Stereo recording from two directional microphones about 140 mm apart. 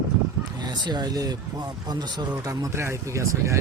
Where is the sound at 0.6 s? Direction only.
30° right (ahead or behind).